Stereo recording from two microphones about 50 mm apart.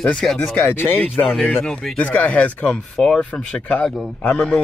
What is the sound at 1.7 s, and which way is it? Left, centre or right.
Speech, centre.